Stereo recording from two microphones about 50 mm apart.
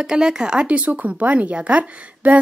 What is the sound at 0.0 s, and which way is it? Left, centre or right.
Speech, centre.